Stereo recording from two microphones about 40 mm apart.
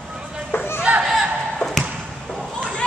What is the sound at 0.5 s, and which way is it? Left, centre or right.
Chatter, left.